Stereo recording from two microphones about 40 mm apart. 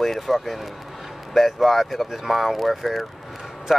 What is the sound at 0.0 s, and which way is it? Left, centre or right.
Speech, centre.